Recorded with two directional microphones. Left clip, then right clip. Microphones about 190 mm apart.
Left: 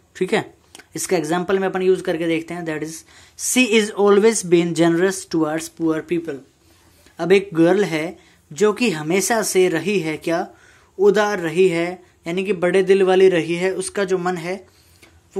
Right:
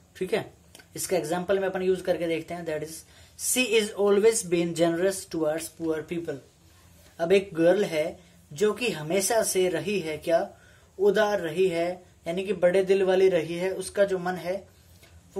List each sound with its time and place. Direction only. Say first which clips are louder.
0.1 s speech: left 8 dB; 35° left (ahead or behind)